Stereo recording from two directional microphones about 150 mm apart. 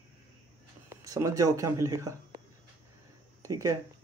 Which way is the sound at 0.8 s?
20° right (ahead or behind).